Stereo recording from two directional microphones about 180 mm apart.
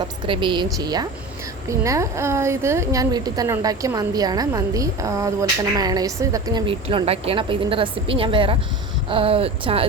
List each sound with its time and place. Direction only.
0.3 s a woman's voice: 25° right (ahead or behind)